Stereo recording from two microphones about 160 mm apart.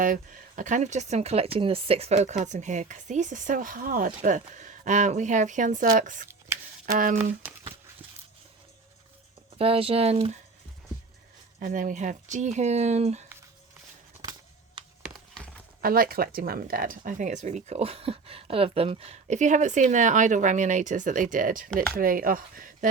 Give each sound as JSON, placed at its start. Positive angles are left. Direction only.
{"t": 0.0, "sound": "speech", "side_deg": -55}
{"t": 6.5, "sound": "scissors", "side_deg": -15}
{"t": 6.8, "sound": "speech", "side_deg": -60}
{"t": 9.6, "sound": "speech", "side_deg": -35}
{"t": 11.6, "sound": "speech", "side_deg": -55}
{"t": 14.8, "sound": "a sound", "side_deg": -30}
{"t": 15.8, "sound": "speech", "side_deg": -65}